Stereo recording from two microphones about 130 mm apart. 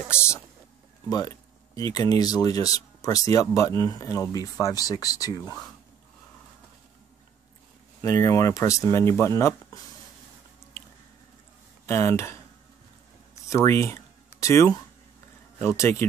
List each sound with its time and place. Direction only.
0.1 s speech: 20° left (ahead or behind)
8.0 s speech: 25° left (ahead or behind)
11.8 s speech: 20° left (ahead or behind)
13.5 s a sound: 20° left (ahead or behind)
15.6 s speech: 20° left (ahead or behind)